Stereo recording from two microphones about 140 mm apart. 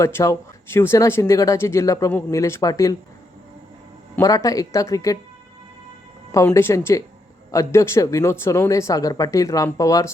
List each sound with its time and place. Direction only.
0.0 s speech: 20° left (ahead or behind)
4.2 s speech: 25° left (ahead or behind)
6.3 s speech: 20° left (ahead or behind)